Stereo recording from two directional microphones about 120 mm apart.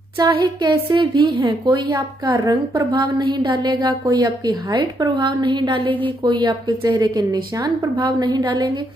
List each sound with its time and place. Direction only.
0.2 s a woman's voice: 40° right (ahead or behind)